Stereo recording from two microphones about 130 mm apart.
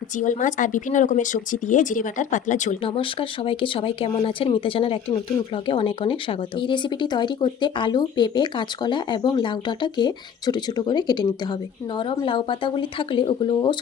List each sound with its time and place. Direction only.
0.2 s speech: 75° left (ahead or behind)
2.8 s speech: 45° left (ahead or behind)